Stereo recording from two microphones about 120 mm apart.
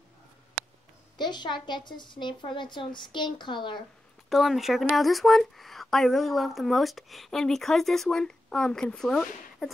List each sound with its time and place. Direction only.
1.1 s a woman's voice: 40° left (ahead or behind)
4.3 s speech: centre (ahead or behind)